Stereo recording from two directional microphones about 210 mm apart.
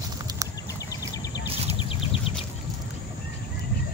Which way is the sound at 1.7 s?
25° left (ahead or behind).